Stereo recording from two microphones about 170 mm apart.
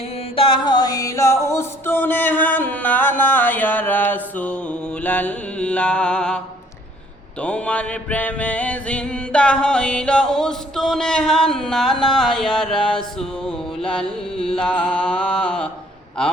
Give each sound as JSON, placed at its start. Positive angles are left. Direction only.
{"t": 0.3, "sound": "music", "side_deg": 30}
{"t": 7.4, "sound": "music", "side_deg": 5}
{"t": 14.3, "sound": "carnatic music", "side_deg": 30}
{"t": 14.6, "sound": "music", "side_deg": 5}